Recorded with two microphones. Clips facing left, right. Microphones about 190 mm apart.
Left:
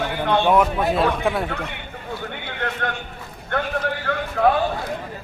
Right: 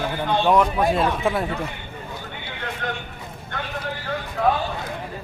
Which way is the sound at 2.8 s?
60° left (ahead or behind).